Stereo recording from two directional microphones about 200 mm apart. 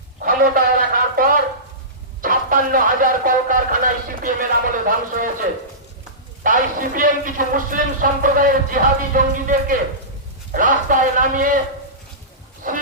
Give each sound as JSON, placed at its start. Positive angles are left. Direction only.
{"t": 0.3, "sound": "a man's voice", "side_deg": -45}
{"t": 12.7, "sound": "a man's voice", "side_deg": -40}